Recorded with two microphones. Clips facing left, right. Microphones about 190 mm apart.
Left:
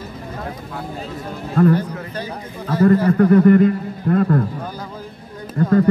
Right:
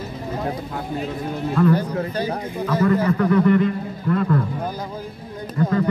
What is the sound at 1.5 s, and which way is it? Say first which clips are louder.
Speech: left 3 dB; 45° left (ahead or behind).